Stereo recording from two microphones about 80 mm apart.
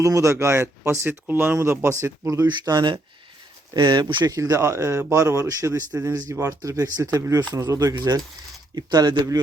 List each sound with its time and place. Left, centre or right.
0.0 s speech: right
2.5 s speech: right
4.3 s speech: right
5.9 s speech: right